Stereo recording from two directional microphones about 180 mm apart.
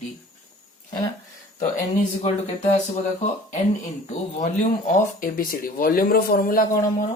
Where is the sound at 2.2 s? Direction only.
40° left (ahead or behind).